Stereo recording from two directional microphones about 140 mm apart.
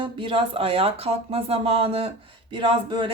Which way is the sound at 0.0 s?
40° right (ahead or behind).